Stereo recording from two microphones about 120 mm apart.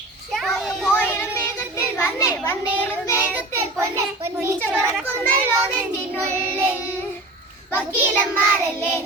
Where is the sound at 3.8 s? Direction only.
25° right (ahead or behind).